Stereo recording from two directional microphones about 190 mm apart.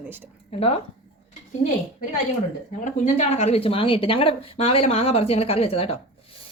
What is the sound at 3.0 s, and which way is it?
Speech, 35° left (ahead or behind).